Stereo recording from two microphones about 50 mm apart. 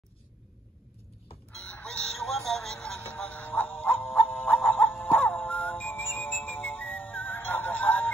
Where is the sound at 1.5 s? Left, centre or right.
Centre.